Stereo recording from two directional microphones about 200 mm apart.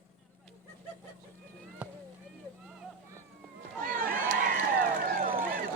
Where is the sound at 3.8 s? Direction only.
45° right (ahead or behind).